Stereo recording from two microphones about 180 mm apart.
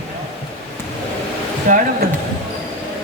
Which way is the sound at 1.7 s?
45° right (ahead or behind).